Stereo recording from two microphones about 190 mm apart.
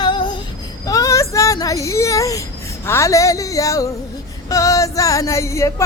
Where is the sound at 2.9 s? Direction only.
15° left (ahead or behind).